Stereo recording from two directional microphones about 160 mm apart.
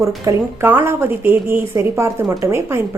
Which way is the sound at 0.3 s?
15° right (ahead or behind).